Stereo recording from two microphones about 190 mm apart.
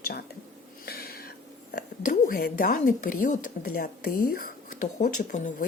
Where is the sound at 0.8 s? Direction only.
55° left (ahead or behind).